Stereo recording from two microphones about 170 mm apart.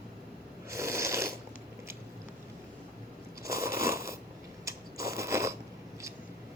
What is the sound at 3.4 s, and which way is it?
Biting, 15° right (ahead or behind).